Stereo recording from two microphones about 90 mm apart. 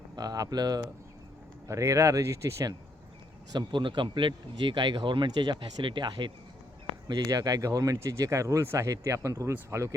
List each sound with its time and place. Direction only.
0.2 s speech: 45° right (ahead or behind)
1.6 s speech: 35° right (ahead or behind)
3.5 s speech: 55° right (ahead or behind)
7.1 s speech: 45° right (ahead or behind)